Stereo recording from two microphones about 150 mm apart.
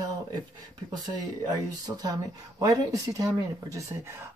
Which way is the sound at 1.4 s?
25° right (ahead or behind).